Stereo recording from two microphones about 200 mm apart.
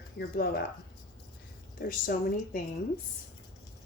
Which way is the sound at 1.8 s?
45° left (ahead or behind).